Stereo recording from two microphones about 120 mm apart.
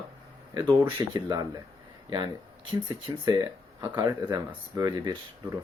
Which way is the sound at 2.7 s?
35° right (ahead or behind).